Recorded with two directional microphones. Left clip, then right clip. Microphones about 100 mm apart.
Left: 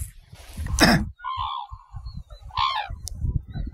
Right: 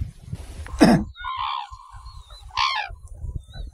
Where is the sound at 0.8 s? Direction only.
25° left (ahead or behind).